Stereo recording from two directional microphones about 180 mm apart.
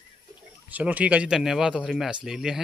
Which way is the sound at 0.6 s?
10° right (ahead or behind).